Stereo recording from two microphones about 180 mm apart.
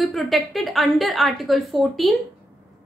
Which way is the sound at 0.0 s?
Centre (ahead or behind).